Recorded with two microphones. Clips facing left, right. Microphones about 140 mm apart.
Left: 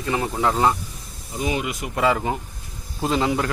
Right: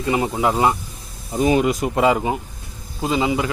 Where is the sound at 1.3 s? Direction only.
45° right (ahead or behind).